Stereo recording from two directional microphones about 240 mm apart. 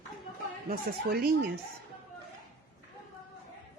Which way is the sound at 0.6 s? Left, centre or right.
Right.